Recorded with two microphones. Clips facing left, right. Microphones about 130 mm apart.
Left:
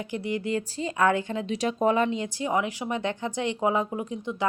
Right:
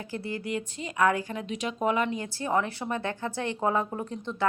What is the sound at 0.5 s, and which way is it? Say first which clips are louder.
A woman's voice: left 4 dB; 30° left (ahead or behind).